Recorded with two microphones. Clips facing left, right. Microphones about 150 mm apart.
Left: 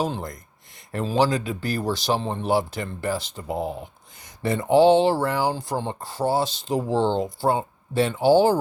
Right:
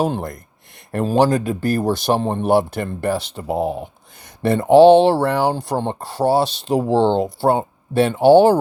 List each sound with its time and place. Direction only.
0.0 s speech: 60° right (ahead or behind)